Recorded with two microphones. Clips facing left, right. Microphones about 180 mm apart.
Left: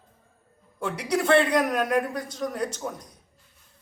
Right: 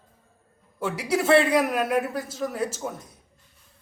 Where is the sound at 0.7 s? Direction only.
5° right (ahead or behind).